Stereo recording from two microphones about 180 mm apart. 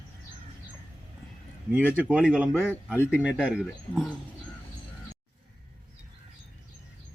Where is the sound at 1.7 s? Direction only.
10° right (ahead or behind).